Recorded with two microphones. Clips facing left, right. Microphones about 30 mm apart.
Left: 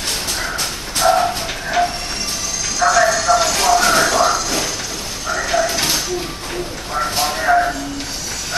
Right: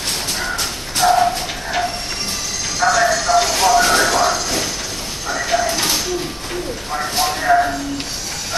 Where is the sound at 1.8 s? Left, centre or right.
Right.